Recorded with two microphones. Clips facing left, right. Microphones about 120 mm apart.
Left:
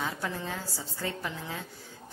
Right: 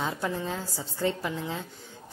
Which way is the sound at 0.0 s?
25° right (ahead or behind).